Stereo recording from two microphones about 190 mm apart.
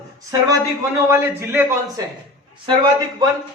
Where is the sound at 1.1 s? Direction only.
10° right (ahead or behind).